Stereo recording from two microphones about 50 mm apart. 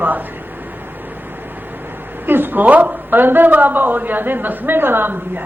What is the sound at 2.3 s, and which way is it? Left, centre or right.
A man's voice, right.